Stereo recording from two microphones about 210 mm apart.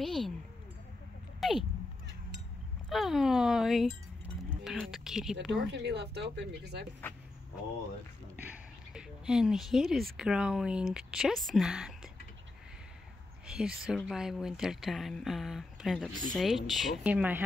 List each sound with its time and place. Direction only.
0.0 s speech: centre (ahead or behind)
1.4 s a sound: centre (ahead or behind)
2.9 s speech: centre (ahead or behind)
5.5 s speech: 55° right (ahead or behind)
8.4 s speech: 5° right (ahead or behind)
13.5 s speech: 5° right (ahead or behind)